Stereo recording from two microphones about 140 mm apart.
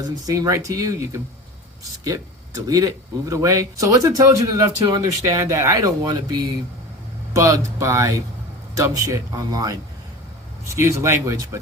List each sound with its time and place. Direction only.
0.0 s speech: 25° right (ahead or behind)
2.6 s speech: 25° right (ahead or behind)
7.3 s speech: 25° right (ahead or behind)